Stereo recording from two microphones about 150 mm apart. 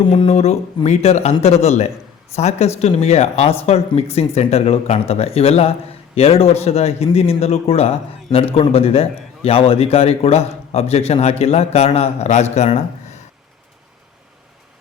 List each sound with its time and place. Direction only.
0.1 s a man's voice: 45° left (ahead or behind)